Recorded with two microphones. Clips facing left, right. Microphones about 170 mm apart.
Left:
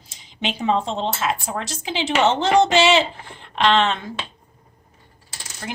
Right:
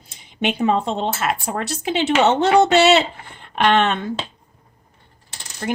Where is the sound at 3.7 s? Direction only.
55° right (ahead or behind).